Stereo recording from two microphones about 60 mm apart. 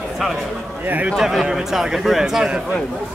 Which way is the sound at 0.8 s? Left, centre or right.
Right.